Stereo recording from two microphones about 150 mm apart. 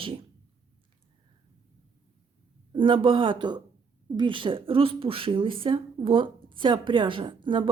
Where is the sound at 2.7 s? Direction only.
35° right (ahead or behind).